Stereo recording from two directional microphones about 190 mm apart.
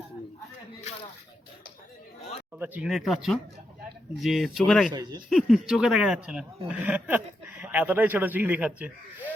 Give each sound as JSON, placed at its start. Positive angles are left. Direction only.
{"t": 2.6, "sound": "speech", "side_deg": -5}
{"t": 4.9, "sound": "speech", "side_deg": -20}
{"t": 5.5, "sound": "speech", "side_deg": -5}